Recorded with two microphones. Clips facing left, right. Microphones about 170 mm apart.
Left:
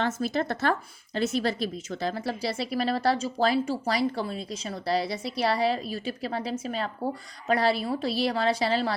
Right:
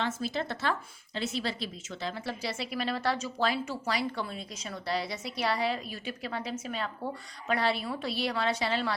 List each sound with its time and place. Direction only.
0.0 s a woman's voice: 45° left (ahead or behind)